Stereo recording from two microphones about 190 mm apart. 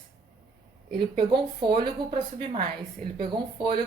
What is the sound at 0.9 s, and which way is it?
A woman's voice, 25° right (ahead or behind).